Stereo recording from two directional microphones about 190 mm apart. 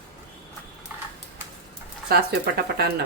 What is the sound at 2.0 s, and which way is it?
Speech, 55° right (ahead or behind).